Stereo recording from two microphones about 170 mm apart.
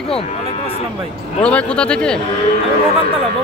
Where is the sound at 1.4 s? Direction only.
5° left (ahead or behind).